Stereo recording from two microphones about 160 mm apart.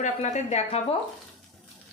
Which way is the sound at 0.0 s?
45° left (ahead or behind).